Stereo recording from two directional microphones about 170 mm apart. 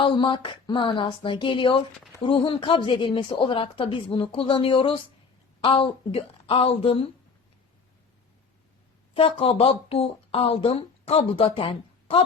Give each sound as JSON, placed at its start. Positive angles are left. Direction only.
{"t": 0.0, "sound": "speech", "side_deg": 30}
{"t": 9.1, "sound": "speech", "side_deg": 35}